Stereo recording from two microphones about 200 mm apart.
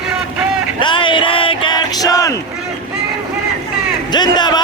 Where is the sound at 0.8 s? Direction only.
25° left (ahead or behind).